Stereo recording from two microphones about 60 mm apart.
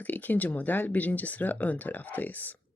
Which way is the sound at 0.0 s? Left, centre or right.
Left.